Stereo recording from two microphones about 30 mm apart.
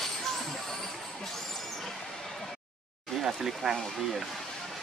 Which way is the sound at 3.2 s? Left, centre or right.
Centre.